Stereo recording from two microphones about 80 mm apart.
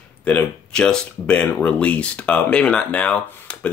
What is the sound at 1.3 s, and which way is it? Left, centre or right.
Speech, centre.